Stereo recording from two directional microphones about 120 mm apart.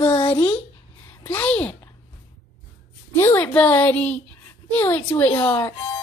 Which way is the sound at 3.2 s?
20° left (ahead or behind).